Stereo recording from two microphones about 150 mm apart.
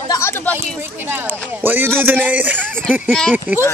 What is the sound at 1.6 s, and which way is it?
Speech, 15° right (ahead or behind).